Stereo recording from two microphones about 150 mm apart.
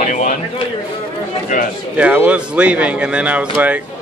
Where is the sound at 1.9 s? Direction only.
10° right (ahead or behind).